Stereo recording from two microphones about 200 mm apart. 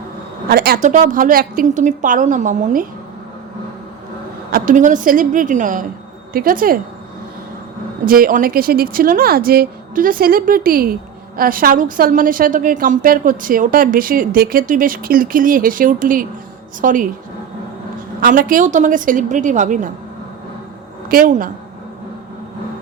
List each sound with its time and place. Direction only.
0.4 s a woman's voice: 50° right (ahead or behind)
4.5 s a woman's voice: 40° right (ahead or behind)
8.0 s a woman's voice: 45° right (ahead or behind)
18.2 s a woman's voice: 45° right (ahead or behind)
21.1 s a woman's voice: 45° right (ahead or behind)